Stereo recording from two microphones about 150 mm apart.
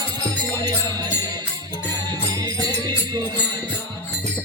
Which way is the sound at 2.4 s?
25° right (ahead or behind).